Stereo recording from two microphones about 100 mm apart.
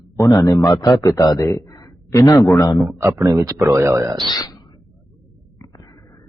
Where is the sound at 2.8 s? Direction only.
30° right (ahead or behind).